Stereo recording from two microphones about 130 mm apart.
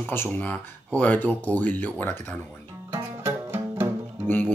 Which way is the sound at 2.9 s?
15° right (ahead or behind).